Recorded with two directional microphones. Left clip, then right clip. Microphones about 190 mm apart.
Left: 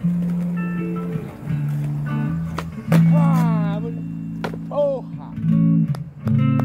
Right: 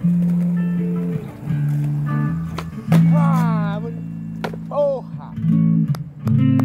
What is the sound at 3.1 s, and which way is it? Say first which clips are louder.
Music: right 1 dB; 40° right (ahead or behind).